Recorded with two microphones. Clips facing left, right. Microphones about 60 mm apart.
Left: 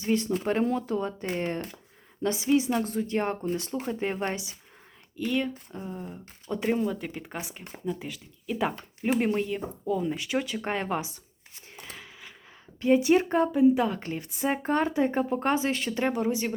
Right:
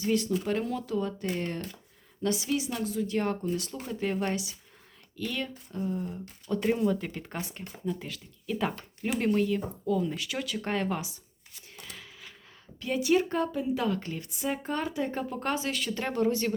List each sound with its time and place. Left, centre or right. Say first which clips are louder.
0.0 s speech: left 1 dB; left
5.1 s speech: left 6 dB; centre
6.7 s speech: right 1 dB; centre; by 11.1 s left
11.8 s a sound: left 2 dB; centre
12.8 s speech: left 5 dB; left
14.0 s speech: left 4 dB; left
16.0 s speech: right 1 dB; centre